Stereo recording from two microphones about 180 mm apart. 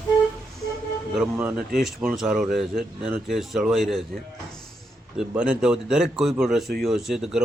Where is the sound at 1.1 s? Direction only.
5° right (ahead or behind).